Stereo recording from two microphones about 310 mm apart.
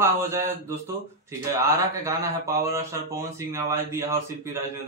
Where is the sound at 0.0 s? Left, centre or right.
Centre.